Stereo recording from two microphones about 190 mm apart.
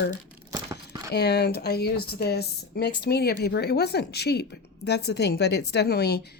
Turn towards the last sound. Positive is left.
turn(degrees=60)  # may be behind; listen again after turning